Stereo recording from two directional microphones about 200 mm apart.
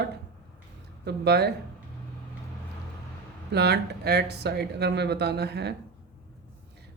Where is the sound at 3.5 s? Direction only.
55° right (ahead or behind).